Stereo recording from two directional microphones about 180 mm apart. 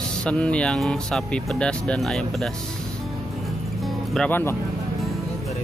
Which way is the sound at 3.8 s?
Centre (ahead or behind).